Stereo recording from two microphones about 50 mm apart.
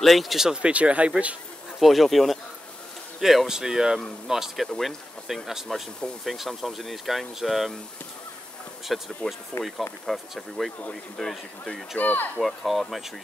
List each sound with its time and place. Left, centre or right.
0.0 s speech: centre
0.5 s speech: right
1.8 s speech: centre
8.9 s speech: centre
9.5 s speech: left
10.0 s speech: centre
12.0 s speech: left
12.4 s speech: centre